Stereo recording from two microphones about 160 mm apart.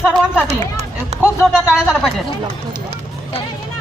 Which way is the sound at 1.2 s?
5° right (ahead or behind).